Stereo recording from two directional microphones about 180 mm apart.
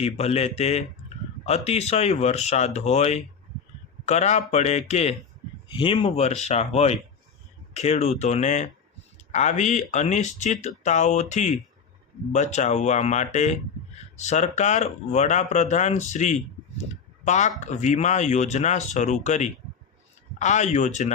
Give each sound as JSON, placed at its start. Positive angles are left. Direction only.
{"t": 0.0, "sound": "speech", "side_deg": 35}